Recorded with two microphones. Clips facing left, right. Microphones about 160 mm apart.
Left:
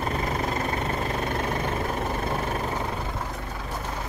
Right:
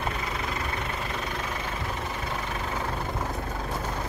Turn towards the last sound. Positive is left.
turn(degrees=45)  # may be behind; listen again after turning